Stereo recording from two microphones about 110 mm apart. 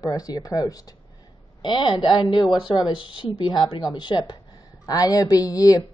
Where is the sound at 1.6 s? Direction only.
50° left (ahead or behind).